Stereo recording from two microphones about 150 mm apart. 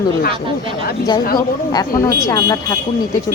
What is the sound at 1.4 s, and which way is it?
Speech, 25° left (ahead or behind).